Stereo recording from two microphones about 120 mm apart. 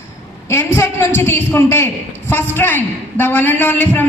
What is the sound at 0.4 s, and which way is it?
A man's voice, 20° left (ahead or behind).